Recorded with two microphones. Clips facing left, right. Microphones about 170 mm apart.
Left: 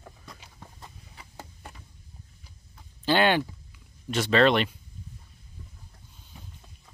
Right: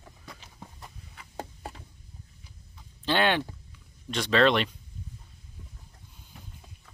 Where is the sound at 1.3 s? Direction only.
30° right (ahead or behind).